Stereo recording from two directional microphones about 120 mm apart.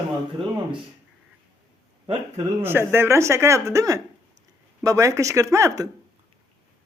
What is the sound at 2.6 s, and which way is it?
Speech, 20° right (ahead or behind).